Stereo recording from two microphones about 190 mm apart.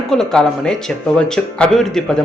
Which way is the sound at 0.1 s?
5° left (ahead or behind).